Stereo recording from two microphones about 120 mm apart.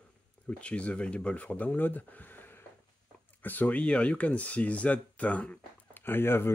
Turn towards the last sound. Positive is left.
turn(degrees=20)  # may be behind; listen again after turning